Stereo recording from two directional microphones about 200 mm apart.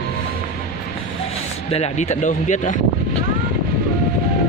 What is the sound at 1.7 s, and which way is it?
Speech, 35° left (ahead or behind).